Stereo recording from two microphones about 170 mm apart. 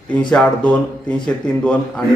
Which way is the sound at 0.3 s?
5° left (ahead or behind).